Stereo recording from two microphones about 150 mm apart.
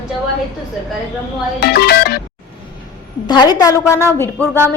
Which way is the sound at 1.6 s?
90° left.